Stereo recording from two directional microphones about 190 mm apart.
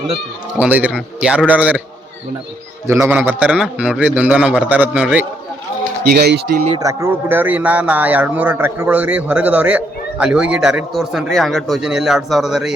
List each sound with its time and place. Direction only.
0.5 s speech: 5° right (ahead or behind)
2.8 s speech: 15° right (ahead or behind)
6.0 s a man's voice: 55° right (ahead or behind)
6.7 s speech: 20° right (ahead or behind); by 12.7 s centre (ahead or behind)